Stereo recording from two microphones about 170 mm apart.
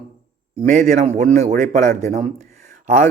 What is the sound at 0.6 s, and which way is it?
A man's voice, 50° right (ahead or behind).